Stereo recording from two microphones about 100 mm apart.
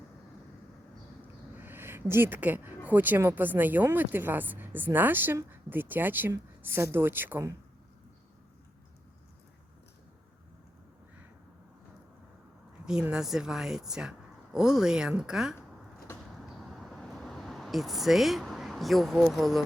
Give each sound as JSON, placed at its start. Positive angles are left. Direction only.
{"t": 1.5, "sound": "speech", "side_deg": -20}
{"t": 12.8, "sound": "a woman's voice", "side_deg": -10}
{"t": 16.6, "sound": "a sound", "side_deg": 0}